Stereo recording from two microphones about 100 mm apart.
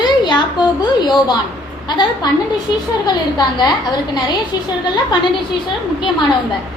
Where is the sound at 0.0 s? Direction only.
50° left (ahead or behind).